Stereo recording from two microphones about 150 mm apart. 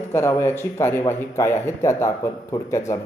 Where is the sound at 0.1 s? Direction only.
15° left (ahead or behind).